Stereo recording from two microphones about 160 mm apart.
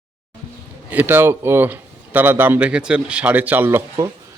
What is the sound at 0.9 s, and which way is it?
Speech, 10° right (ahead or behind).